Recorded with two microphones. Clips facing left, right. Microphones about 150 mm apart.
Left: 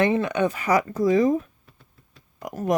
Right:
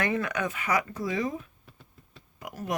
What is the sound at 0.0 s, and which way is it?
Speech, 25° left (ahead or behind).